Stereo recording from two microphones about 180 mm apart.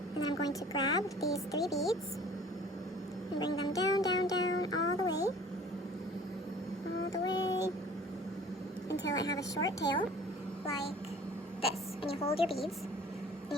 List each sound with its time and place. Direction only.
0.3 s child singing: 20° left (ahead or behind)
1.6 s speech: centre (ahead or behind)
3.3 s child singing: 20° left (ahead or behind)
7.1 s child singing: 20° left (ahead or behind)
9.1 s child singing: 20° left (ahead or behind)
11.6 s a woman's voice: 30° left (ahead or behind)